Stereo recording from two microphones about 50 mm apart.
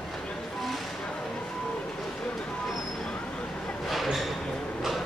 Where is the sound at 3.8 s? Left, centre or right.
Centre.